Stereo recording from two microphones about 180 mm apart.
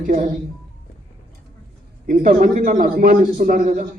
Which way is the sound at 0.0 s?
45° right (ahead or behind).